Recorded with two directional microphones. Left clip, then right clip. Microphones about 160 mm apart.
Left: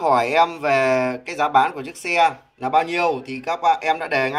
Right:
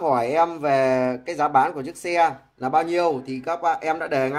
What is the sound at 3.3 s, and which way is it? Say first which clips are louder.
Speech: left 4 dB; 10° left (ahead or behind).